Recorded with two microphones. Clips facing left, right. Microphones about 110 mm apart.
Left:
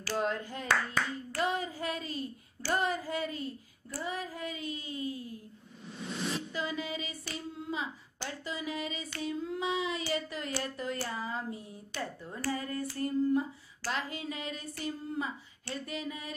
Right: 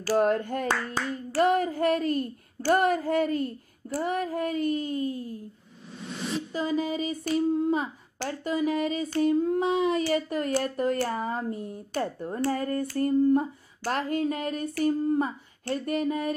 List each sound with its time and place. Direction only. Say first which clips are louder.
0.2 s speech: right 9 dB; 55° right (ahead or behind)
1.4 s a sound: right 10 dB; 60° right (ahead or behind); by 5.4 s 45° right (ahead or behind)
6.5 s speech: right 8 dB; 40° right (ahead or behind)